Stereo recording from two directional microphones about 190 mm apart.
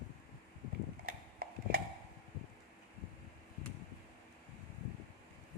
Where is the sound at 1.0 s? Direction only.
55° right (ahead or behind).